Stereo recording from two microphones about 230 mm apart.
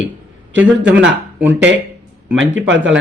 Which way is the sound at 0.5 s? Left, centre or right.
Centre.